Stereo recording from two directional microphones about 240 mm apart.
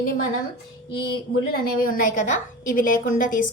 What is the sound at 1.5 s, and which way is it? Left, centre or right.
A woman's voice, left.